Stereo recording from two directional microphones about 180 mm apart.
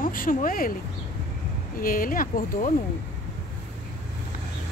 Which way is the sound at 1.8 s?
50° left (ahead or behind).